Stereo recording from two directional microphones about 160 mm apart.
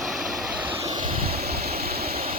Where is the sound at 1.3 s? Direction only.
75° right (ahead or behind).